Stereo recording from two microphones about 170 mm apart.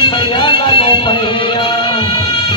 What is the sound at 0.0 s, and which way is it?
Music, 30° left (ahead or behind).